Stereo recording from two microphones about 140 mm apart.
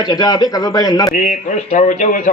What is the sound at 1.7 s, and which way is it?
Speech, 65° left (ahead or behind).